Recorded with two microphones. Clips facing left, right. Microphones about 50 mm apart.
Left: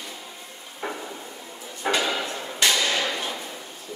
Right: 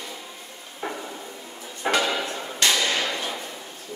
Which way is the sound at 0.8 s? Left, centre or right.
Left.